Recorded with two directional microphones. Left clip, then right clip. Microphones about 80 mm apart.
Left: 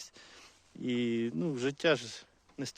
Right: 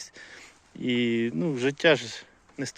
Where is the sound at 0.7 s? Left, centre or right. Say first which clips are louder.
Right 7 dB; left.